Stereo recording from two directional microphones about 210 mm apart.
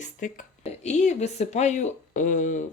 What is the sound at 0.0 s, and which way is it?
Speech, 35° left (ahead or behind).